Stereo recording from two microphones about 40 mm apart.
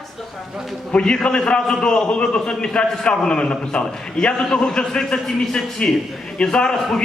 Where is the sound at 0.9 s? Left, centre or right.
Left.